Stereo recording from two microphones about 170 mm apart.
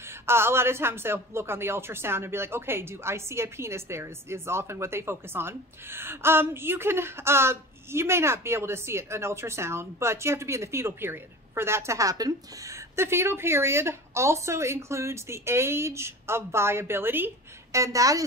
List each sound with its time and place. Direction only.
0.3 s a woman's voice: 15° right (ahead or behind)